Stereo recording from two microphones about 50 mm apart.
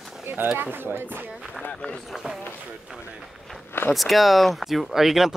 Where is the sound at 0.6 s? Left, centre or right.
Right.